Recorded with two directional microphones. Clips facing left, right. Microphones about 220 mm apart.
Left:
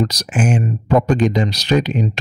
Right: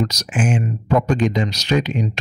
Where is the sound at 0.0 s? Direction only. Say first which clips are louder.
Left 2 dB; 35° left (ahead or behind).